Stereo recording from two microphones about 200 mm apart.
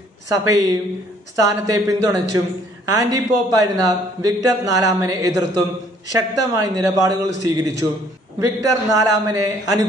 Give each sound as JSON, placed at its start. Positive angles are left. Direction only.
{"t": 0.3, "sound": "speech", "side_deg": -20}